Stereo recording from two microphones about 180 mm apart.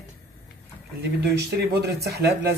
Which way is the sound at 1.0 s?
65° right (ahead or behind).